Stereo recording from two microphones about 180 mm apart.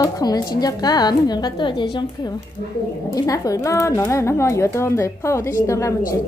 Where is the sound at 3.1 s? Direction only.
20° left (ahead or behind).